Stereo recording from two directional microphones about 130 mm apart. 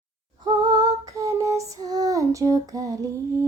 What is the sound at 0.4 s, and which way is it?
Female singing, 35° right (ahead or behind).